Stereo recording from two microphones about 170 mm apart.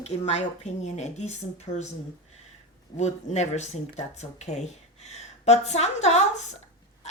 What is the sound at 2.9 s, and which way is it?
Speech, 40° left (ahead or behind).